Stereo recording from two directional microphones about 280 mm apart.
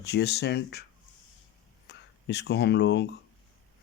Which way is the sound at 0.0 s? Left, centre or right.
Left.